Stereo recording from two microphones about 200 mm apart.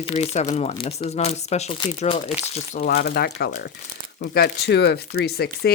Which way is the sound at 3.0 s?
55° left (ahead or behind).